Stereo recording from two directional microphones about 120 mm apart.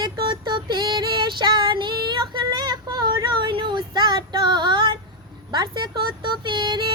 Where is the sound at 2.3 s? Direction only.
35° right (ahead or behind).